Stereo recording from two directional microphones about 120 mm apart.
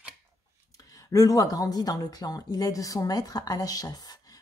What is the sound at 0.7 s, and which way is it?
A woman's voice, 30° left (ahead or behind).